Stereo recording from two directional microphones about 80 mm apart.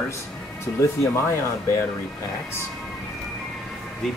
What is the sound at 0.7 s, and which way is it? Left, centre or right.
Speech, left.